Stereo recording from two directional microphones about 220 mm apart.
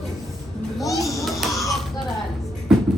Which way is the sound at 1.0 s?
Centre (ahead or behind).